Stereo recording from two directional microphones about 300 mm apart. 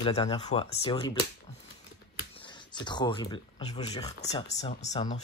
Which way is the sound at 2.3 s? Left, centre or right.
Centre.